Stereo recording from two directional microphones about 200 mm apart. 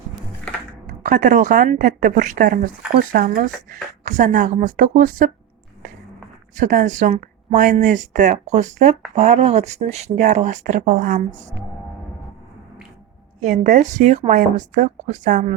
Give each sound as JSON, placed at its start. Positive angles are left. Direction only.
{"t": 0.9, "sound": "speech", "side_deg": -40}
{"t": 6.6, "sound": "speech", "side_deg": -40}
{"t": 13.4, "sound": "speech", "side_deg": -35}